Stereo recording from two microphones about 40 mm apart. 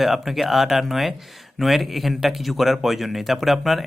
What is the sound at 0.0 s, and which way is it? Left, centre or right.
Speech, centre.